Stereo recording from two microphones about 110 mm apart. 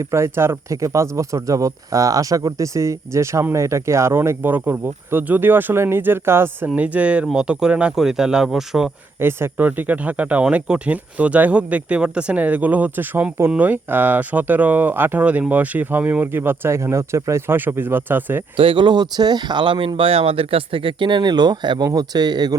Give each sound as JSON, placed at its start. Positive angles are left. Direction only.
{"t": 0.0, "sound": "speech", "side_deg": -25}
{"t": 9.2, "sound": "speech", "side_deg": -20}
{"t": 18.5, "sound": "speech", "side_deg": -50}